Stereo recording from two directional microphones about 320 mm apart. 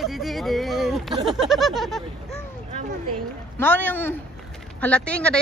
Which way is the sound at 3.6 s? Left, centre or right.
Centre.